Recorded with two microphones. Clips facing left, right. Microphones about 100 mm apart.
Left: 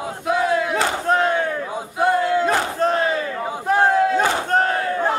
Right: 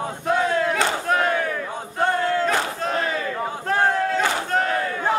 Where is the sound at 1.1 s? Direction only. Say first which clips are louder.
Left 4 dB; 30° left (ahead or behind).